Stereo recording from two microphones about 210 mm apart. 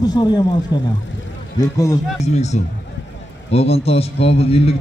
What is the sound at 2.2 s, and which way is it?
A man's voice, 30° left (ahead or behind).